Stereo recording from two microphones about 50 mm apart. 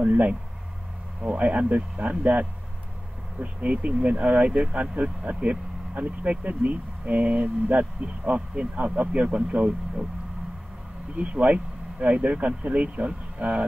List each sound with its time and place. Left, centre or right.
0.0 s speech: right
11.1 s speech: right